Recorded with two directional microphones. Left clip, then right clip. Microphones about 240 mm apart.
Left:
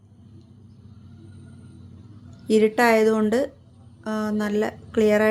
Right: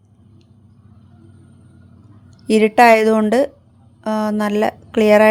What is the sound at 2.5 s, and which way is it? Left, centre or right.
A woman's voice, right.